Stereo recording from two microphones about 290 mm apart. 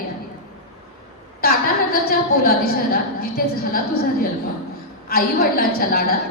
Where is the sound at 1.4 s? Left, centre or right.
Left.